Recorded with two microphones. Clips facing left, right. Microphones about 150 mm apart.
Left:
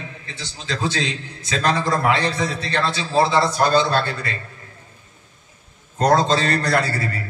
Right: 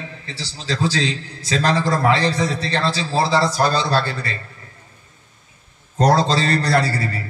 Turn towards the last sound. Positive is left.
turn(degrees=-30)  # may be behind; listen again after turning